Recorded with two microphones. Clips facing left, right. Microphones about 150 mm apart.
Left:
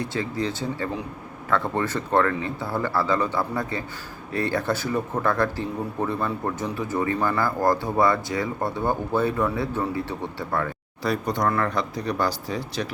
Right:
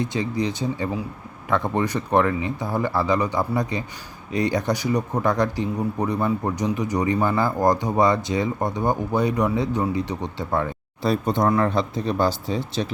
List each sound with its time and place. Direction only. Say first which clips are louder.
0.0 s speech: right 3 dB; 20° right (ahead or behind)